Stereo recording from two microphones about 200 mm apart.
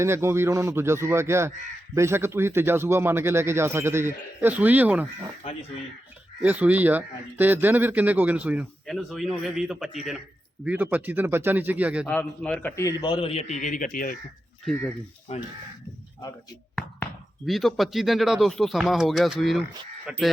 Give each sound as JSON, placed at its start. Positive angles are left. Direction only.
{"t": 0.0, "sound": "speech", "side_deg": -15}
{"t": 6.4, "sound": "speech", "side_deg": -10}
{"t": 12.0, "sound": "a man's voice", "side_deg": 5}
{"t": 14.6, "sound": "speech", "side_deg": 0}
{"t": 15.3, "sound": "speech", "side_deg": 30}
{"t": 16.7, "sound": "speech", "side_deg": 0}